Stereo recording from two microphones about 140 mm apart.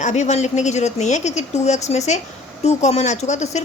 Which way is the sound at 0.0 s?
55° left (ahead or behind).